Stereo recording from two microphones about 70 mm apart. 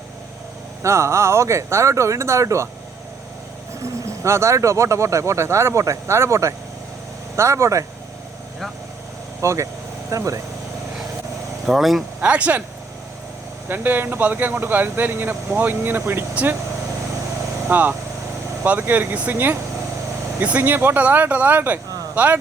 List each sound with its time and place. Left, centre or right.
0.8 s speech: right
3.8 s speech: right
9.4 s speech: right
11.6 s speech: centre
12.2 s speech: centre
13.7 s speech: right
17.7 s speech: right
20.4 s speech: right